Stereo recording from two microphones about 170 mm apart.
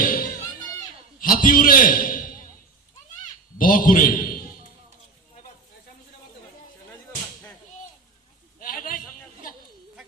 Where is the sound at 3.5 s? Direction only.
55° left (ahead or behind).